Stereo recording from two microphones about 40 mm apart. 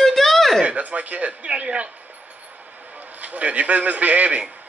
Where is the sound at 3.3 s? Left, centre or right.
Right.